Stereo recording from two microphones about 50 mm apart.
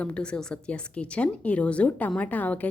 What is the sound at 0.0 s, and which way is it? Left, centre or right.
A woman's voice, left.